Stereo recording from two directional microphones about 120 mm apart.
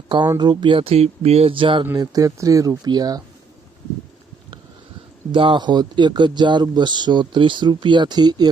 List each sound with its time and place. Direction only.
0.3 s speech: 40° right (ahead or behind)
2.0 s speech: 30° right (ahead or behind)
5.3 s speech: 45° right (ahead or behind)